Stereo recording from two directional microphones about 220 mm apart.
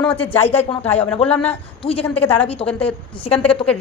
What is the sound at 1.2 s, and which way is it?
A man's voice, 5° left (ahead or behind).